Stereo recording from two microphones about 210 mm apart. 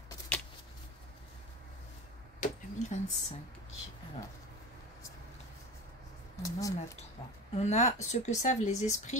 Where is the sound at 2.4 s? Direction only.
35° left (ahead or behind).